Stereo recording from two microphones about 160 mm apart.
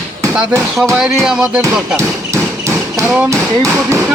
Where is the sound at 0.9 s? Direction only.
5° right (ahead or behind).